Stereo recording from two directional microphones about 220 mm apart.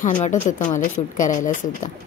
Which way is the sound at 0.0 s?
35° left (ahead or behind).